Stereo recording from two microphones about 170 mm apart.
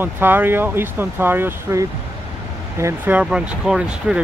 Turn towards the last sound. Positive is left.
turn(degrees=-5)  # may be behind; listen again after turning